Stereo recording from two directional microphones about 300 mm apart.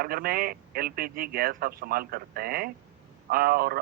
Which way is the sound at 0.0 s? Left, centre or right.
Right.